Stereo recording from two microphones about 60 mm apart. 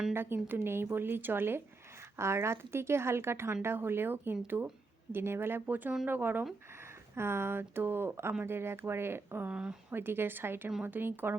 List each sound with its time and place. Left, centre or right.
0.1 s speech: right
2.1 s a woman's voice: right
9.5 s speech: centre
9.9 s speech: right